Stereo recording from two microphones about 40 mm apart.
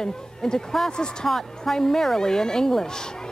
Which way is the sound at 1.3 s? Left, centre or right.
Centre.